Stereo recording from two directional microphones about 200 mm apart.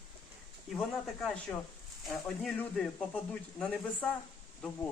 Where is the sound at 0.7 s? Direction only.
Centre (ahead or behind).